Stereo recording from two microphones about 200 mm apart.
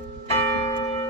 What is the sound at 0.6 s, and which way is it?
Church bell, 20° left (ahead or behind).